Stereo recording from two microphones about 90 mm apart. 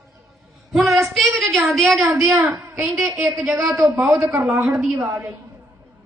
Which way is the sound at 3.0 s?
35° right (ahead or behind).